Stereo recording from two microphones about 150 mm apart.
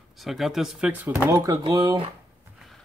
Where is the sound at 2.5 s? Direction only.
Centre (ahead or behind).